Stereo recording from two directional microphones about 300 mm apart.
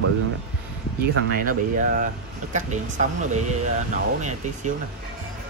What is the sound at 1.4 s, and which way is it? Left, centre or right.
Speech, right.